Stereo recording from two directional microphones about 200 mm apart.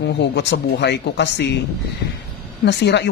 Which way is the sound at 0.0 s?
60° left (ahead or behind).